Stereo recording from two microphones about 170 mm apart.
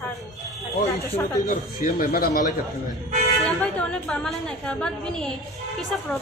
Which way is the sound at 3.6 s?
5° left (ahead or behind).